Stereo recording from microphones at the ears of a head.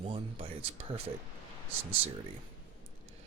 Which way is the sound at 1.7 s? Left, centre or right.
Right.